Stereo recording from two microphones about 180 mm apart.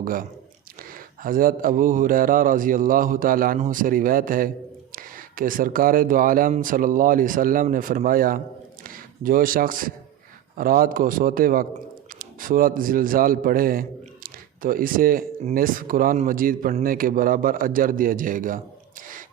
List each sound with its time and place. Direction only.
0.0 s a man's voice: 50° right (ahead or behind)
14.3 s a sound: 50° right (ahead or behind)
15.5 s a man's voice: 50° right (ahead or behind)